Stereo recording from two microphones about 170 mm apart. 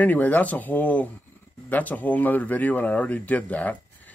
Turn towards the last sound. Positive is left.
turn(degrees=10)  # may be behind; listen again after turning